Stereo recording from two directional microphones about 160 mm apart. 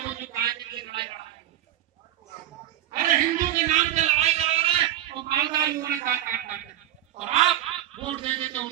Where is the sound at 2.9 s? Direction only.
55° right (ahead or behind).